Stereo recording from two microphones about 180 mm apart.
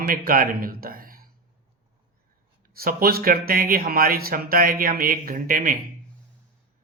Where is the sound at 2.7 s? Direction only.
55° right (ahead or behind).